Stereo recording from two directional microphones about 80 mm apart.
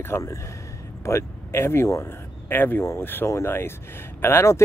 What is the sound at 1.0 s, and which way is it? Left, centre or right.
Speech, left.